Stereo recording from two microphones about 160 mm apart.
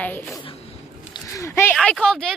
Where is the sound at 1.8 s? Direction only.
5° left (ahead or behind).